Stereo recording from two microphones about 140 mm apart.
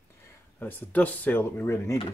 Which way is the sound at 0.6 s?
10° left (ahead or behind).